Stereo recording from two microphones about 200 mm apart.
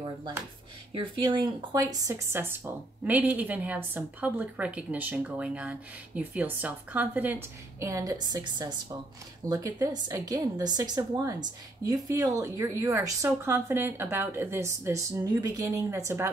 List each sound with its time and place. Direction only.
0.9 s speech: 25° right (ahead or behind)